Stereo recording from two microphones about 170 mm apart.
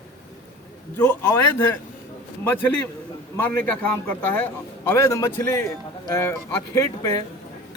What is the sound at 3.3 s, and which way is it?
A man's voice, 10° left (ahead or behind).